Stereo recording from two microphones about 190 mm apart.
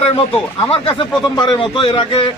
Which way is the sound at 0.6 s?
30° left (ahead or behind).